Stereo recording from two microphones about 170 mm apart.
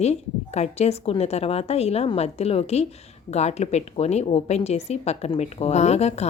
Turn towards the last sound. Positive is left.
turn(degrees=40)  # may be behind; listen again after turning